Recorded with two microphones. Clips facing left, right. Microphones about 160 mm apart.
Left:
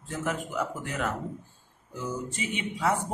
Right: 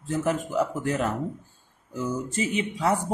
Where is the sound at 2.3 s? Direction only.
35° right (ahead or behind).